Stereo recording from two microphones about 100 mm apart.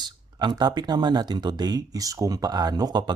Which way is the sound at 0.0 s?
45° right (ahead or behind).